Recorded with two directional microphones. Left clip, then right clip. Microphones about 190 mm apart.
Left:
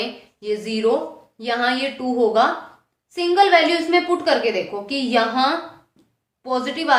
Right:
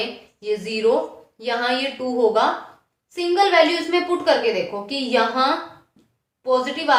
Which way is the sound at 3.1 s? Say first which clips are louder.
Left 1 dB; 20° left (ahead or behind).